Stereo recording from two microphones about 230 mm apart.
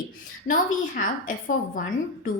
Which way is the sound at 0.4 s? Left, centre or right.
Left.